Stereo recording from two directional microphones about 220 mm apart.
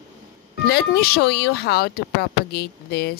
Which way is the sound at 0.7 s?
45° left (ahead or behind).